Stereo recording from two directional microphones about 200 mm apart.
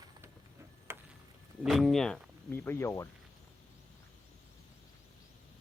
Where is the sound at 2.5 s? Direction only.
10° left (ahead or behind).